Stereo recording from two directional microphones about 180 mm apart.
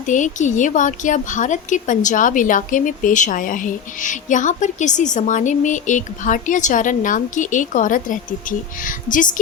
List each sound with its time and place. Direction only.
0.1 s a woman's voice: 45° left (ahead or behind)